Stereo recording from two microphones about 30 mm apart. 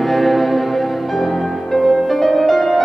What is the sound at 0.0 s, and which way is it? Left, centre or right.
Music, centre.